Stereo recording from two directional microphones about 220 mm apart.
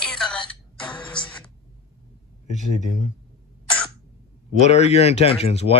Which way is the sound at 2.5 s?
30° left (ahead or behind).